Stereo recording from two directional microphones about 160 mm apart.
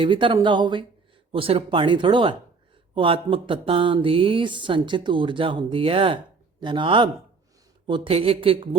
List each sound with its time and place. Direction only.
0.0 s speech: 30° right (ahead or behind)